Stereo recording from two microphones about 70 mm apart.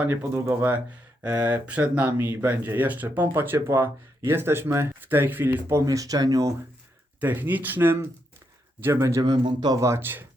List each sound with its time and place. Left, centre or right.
0.2 s speech: right
1.5 s speech: right
3.7 s speech: right
5.7 s speech: right
7.2 s speech: right
8.8 s speech: right
9.2 s speech: right
9.8 s speech: right